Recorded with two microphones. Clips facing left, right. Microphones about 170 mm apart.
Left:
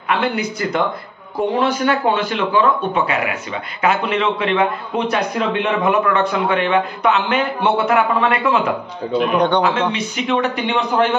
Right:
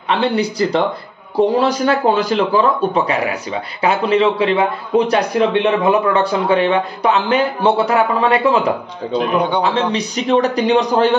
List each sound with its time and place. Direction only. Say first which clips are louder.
0.1 s a man's voice: right 3 dB; 35° right (ahead or behind)